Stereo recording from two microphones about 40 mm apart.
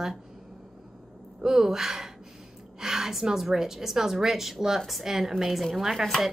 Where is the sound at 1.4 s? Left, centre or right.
Centre.